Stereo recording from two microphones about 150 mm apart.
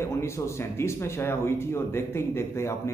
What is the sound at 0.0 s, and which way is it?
A man's voice, 15° left (ahead or behind).